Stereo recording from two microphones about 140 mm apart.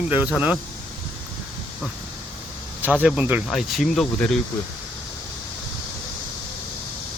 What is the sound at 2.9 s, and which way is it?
Speech, 5° right (ahead or behind).